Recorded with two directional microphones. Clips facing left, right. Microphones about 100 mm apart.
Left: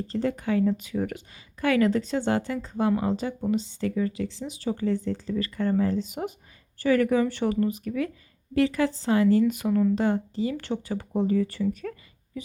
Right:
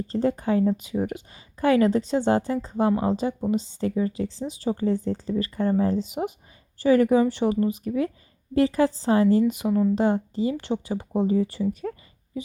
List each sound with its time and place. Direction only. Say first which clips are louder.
0.1 s a woman's voice: right 3 dB; 30° right (ahead or behind)